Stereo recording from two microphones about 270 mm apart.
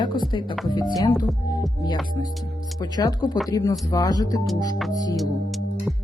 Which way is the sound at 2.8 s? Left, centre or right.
Centre.